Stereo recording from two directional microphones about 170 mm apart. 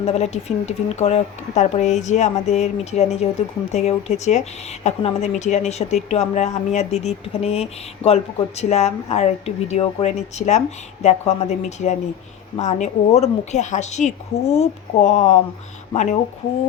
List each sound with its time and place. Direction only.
0.0 s a woman's voice: 40° left (ahead or behind)